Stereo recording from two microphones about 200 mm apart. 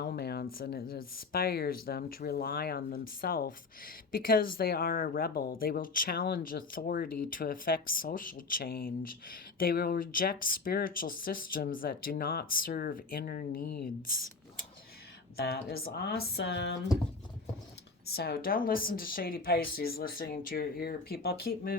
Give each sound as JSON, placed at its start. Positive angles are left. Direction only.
{"t": 0.0, "sound": "speech", "side_deg": 50}
{"t": 15.4, "sound": "speech", "side_deg": 55}
{"t": 18.2, "sound": "speech", "side_deg": 50}